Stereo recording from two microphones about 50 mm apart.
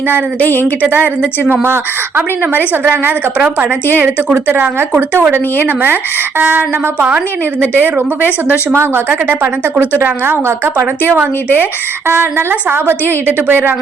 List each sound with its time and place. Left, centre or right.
0.3 s a woman's voice: left
0.8 s a woman's voice: right
1.6 s a woman's voice: right
3.3 s a woman's voice: right
7.8 s a woman's voice: right
10.8 s a woman's voice: right